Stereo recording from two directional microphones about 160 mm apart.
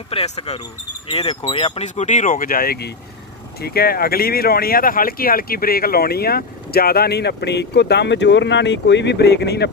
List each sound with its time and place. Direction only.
0.1 s speech: 40° left (ahead or behind); by 9.7 s 90° left